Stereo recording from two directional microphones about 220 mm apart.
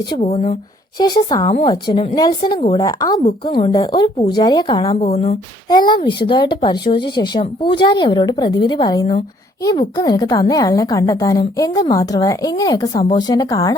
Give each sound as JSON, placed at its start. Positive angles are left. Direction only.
{"t": 0.1, "sound": "speech", "side_deg": 25}
{"t": 5.6, "sound": "a woman's voice", "side_deg": 20}